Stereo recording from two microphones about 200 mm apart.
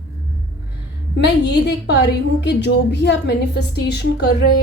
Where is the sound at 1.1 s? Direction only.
60° left (ahead or behind).